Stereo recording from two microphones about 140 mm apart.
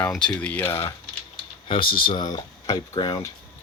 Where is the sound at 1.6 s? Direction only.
40° left (ahead or behind).